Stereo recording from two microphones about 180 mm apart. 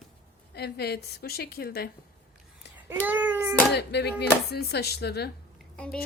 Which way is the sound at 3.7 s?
65° left (ahead or behind).